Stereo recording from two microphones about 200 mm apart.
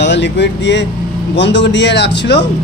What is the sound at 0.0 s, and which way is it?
A man's voice, 60° left (ahead or behind).